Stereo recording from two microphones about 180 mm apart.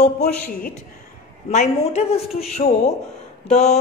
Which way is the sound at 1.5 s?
40° left (ahead or behind).